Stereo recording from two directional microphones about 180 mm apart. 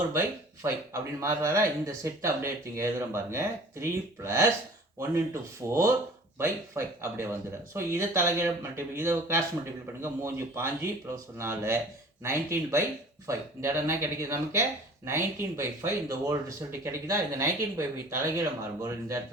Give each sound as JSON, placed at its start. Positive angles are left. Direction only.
{"t": 0.1, "sound": "speech", "side_deg": -15}